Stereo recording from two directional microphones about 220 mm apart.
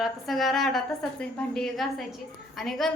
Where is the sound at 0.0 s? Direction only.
Centre (ahead or behind).